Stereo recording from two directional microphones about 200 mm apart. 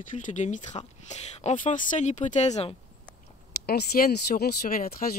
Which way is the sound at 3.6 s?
50° left (ahead or behind).